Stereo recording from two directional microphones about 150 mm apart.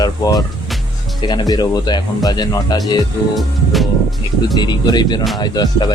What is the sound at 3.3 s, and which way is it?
Music, centre (ahead or behind).